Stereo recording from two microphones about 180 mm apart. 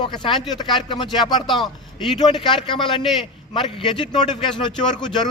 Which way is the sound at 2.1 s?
25° left (ahead or behind).